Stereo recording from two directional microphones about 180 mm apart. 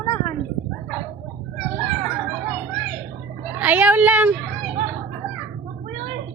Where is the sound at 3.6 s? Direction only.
10° right (ahead or behind).